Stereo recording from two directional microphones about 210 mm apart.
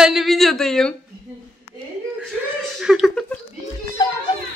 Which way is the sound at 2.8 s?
Centre (ahead or behind).